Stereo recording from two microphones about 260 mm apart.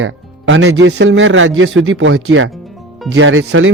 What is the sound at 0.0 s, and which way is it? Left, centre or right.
A man's voice, right.